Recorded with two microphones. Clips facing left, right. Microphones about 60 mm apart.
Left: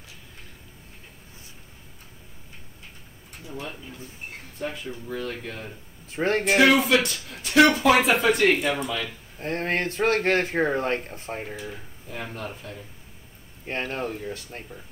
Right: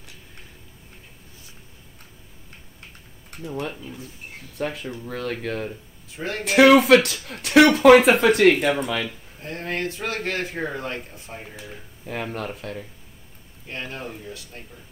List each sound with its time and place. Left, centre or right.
3.3 s speech: right
6.0 s speech: left
6.4 s speech: right
9.4 s speech: left
12.1 s speech: right
13.7 s speech: left